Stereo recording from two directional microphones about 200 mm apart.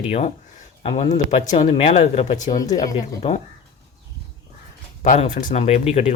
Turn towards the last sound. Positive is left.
turn(degrees=30)  # may be behind; listen again after turning